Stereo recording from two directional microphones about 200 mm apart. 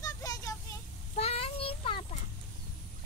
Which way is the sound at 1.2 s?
30° left (ahead or behind).